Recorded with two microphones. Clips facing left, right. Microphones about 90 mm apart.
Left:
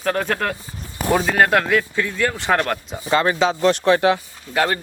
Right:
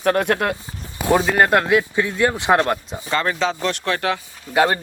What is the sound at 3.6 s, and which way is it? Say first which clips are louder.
Speech: left 6 dB; 20° left (ahead or behind).